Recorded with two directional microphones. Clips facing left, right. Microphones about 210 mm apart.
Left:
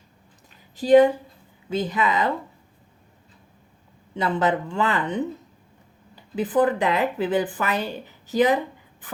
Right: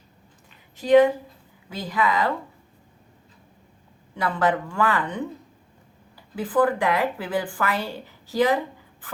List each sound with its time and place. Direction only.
0.8 s a woman's voice: 30° left (ahead or behind)
4.1 s a woman's voice: 20° left (ahead or behind)